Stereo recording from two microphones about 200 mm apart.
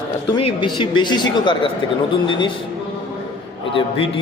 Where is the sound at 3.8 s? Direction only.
30° left (ahead or behind).